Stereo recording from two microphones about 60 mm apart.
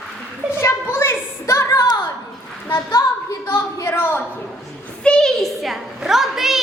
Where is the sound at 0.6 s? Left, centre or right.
Left.